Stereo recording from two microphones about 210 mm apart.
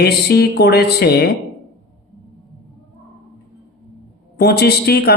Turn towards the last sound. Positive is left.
turn(degrees=50)  # may be behind; listen again after turning